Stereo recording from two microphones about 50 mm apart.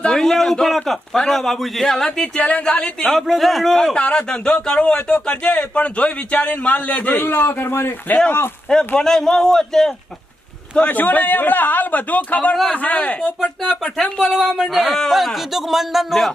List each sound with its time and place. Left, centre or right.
0.0 s a man's voice: centre
2.2 s a man's voice: left
3.0 s a man's voice: centre
3.9 s a man's voice: left
7.3 s a man's voice: left
9.0 s a man's voice: centre
10.8 s a man's voice: left
13.8 s a man's voice: centre
14.4 s a man's voice: centre